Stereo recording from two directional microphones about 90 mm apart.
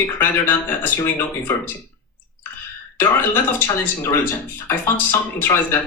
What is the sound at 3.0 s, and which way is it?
Speech, 25° left (ahead or behind).